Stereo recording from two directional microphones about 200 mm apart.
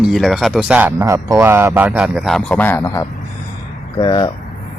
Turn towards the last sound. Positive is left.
turn(degrees=20)  # may be behind; listen again after turning